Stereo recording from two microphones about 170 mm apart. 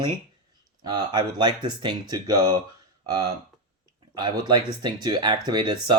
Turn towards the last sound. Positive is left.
turn(degrees=-25)  # may be behind; listen again after turning